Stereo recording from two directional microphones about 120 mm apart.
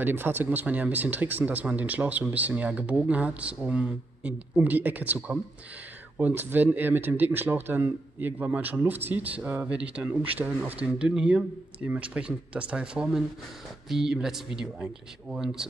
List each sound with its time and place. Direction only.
0.0 s speech: 15° right (ahead or behind)